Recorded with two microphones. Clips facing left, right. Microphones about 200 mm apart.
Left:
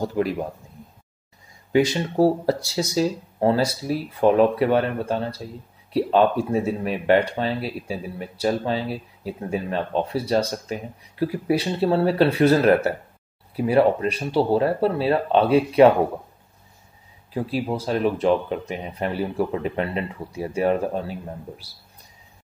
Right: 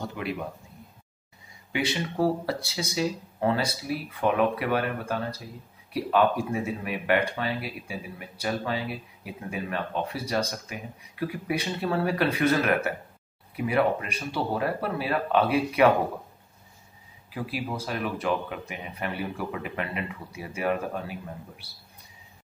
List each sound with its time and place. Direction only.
0.0 s speech: 40° left (ahead or behind)
1.7 s speech: 40° left (ahead or behind)
17.3 s speech: 30° left (ahead or behind)